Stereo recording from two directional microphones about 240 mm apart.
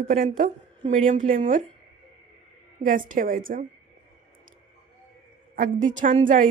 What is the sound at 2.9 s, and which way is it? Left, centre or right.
Speech, right.